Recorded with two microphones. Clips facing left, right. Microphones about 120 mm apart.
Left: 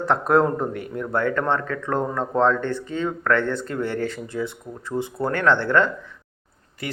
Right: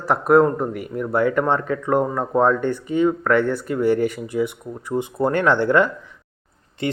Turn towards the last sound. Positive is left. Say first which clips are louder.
# right 7 dB
turn(degrees=-25)  # may be behind; listen again after turning